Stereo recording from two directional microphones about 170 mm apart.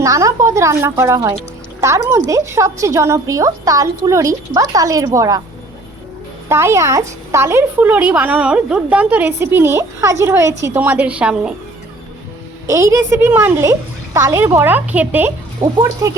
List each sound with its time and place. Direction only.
0.0 s a woman's voice: 20° right (ahead or behind)
6.5 s a woman's voice: 15° right (ahead or behind)
12.6 s a woman's voice: 20° right (ahead or behind)